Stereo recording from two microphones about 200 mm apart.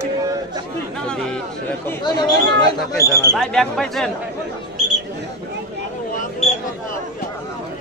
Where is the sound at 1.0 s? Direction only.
5° left (ahead or behind).